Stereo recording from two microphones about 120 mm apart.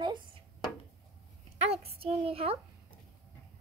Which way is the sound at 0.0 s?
40° right (ahead or behind).